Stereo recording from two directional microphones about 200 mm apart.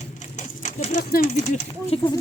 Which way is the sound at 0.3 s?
40° left (ahead or behind).